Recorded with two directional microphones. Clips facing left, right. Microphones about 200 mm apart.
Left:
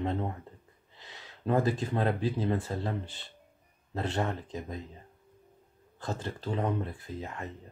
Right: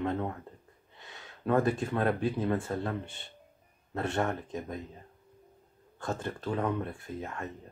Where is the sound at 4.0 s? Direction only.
20° left (ahead or behind).